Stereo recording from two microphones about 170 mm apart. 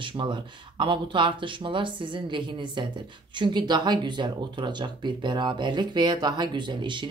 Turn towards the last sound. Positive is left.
turn(degrees=-30)  # may be behind; listen again after turning